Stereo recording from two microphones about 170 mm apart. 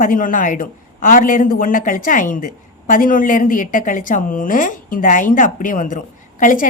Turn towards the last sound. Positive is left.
turn(degrees=50)  # may be behind; listen again after turning